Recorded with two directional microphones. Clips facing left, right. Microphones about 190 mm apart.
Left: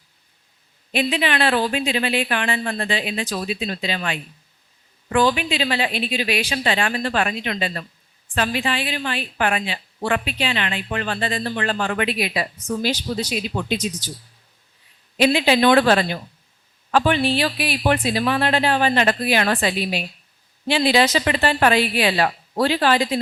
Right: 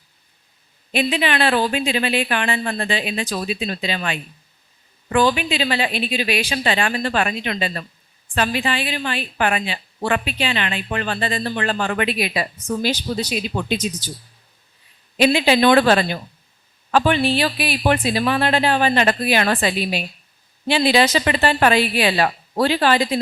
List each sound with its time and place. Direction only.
0.9 s a woman's voice: 10° right (ahead or behind)
15.2 s a woman's voice: 10° right (ahead or behind)